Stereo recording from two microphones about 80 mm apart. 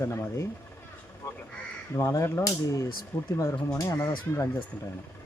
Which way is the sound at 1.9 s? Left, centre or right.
Left.